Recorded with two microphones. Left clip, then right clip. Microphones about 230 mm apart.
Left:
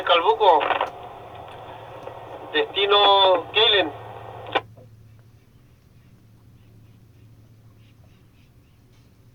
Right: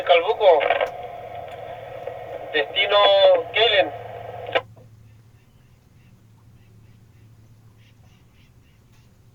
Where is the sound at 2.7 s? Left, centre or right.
Centre.